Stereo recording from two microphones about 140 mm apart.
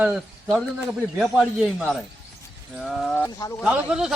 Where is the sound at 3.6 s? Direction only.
5° right (ahead or behind).